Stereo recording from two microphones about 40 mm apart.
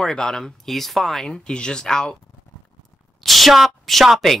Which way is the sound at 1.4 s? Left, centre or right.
Left.